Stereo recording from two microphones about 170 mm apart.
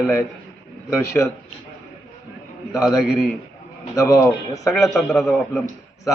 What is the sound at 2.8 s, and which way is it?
Speech, centre (ahead or behind).